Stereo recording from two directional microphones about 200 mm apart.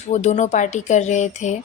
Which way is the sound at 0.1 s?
35° left (ahead or behind).